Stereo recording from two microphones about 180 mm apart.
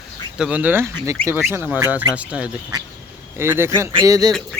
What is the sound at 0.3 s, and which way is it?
Speech, 5° right (ahead or behind).